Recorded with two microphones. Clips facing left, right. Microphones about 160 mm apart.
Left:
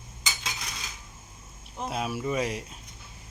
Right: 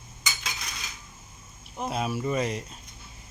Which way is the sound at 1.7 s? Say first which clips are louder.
Right 2 dB; centre (ahead or behind).